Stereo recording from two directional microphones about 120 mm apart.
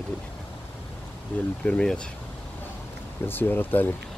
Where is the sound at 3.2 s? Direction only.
15° left (ahead or behind).